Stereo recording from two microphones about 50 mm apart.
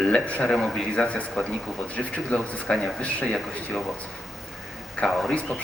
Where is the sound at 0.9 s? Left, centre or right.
Left.